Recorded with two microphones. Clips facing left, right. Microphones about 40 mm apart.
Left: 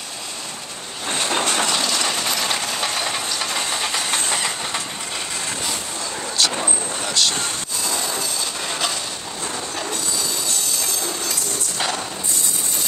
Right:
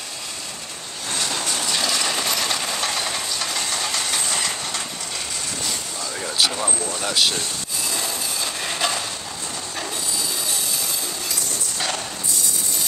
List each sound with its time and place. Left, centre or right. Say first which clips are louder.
1.1 s train: left 4 dB; left
1.4 s train: left 6 dB; left
1.8 s coin: left 1 dB; centre
2.2 s train: left 1 dB; centre
6.2 s a sound: even; centre
7.1 s speech: even; centre
8.6 s a sound: right 2 dB; centre